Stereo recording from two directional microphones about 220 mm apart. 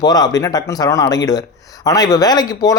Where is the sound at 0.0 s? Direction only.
15° left (ahead or behind).